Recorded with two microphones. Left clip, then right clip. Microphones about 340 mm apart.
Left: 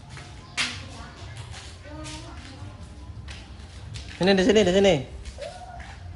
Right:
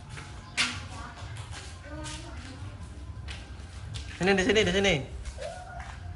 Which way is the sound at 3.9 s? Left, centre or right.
Centre.